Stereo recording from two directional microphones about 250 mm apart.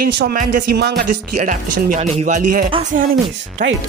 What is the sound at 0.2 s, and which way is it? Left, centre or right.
Speech, right.